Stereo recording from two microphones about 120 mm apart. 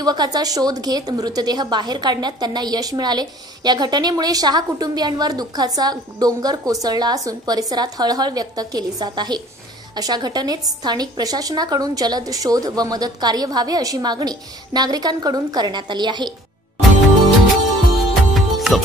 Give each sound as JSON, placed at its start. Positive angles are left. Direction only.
{"t": 0.0, "sound": "a woman's voice", "side_deg": -35}
{"t": 18.3, "sound": "music", "side_deg": 0}